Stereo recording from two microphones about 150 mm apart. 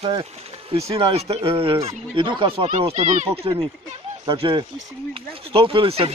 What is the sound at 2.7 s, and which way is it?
Speech, 45° right (ahead or behind).